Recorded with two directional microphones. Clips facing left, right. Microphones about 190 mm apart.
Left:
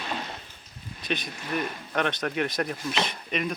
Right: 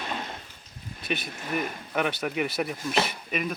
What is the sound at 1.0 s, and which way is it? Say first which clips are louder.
Speech: even; 5° right (ahead or behind).